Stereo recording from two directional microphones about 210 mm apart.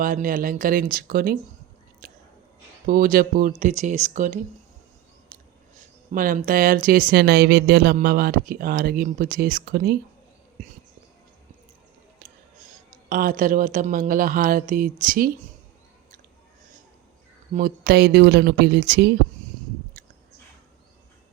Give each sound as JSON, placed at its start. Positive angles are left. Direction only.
{"t": 0.0, "sound": "speech", "side_deg": -40}
{"t": 2.0, "sound": "biting", "side_deg": -40}
{"t": 2.8, "sound": "speech", "side_deg": -40}
{"t": 5.7, "sound": "speech", "side_deg": -35}
{"t": 12.2, "sound": "music", "side_deg": -45}
{"t": 13.1, "sound": "speech", "side_deg": -40}
{"t": 17.5, "sound": "speech", "side_deg": -45}